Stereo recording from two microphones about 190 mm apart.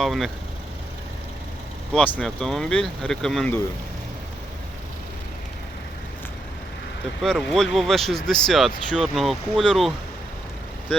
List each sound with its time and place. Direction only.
0.0 s speech: centre (ahead or behind)
1.9 s speech: 5° left (ahead or behind)
7.2 s speech: centre (ahead or behind)